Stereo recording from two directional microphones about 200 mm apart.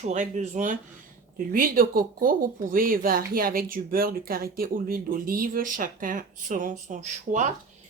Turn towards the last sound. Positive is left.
turn(degrees=-35)  # may be behind; listen again after turning